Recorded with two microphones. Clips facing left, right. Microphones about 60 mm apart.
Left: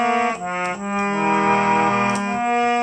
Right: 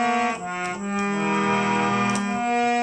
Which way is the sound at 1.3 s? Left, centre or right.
Left.